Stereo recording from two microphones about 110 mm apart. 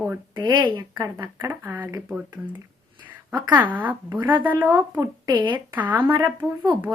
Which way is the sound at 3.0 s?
15° right (ahead or behind).